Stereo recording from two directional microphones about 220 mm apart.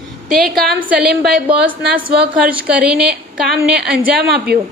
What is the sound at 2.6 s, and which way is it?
A woman's voice, 5° right (ahead or behind).